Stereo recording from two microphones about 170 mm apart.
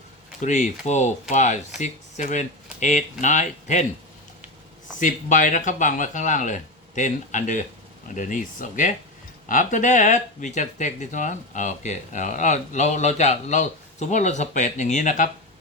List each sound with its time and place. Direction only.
0.4 s speech: 45° left (ahead or behind)
4.9 s speech: 50° left (ahead or behind)